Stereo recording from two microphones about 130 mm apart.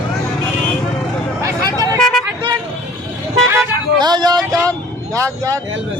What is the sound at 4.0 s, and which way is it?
Speech, 35° right (ahead or behind).